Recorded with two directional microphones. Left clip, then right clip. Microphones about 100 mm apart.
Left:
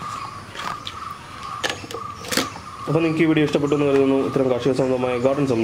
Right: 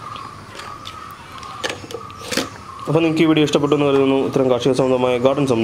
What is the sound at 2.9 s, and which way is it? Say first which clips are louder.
A man's voice: right 3 dB; 35° right (ahead or behind).